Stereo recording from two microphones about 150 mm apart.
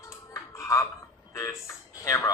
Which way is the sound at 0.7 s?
20° left (ahead or behind).